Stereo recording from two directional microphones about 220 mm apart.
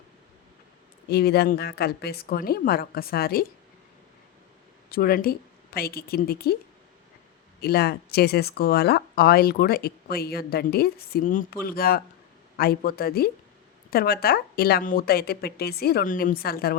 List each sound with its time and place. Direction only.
1.1 s speech: 45° left (ahead or behind)
4.9 s a woman's voice: 40° left (ahead or behind)
7.6 s speech: 45° left (ahead or behind)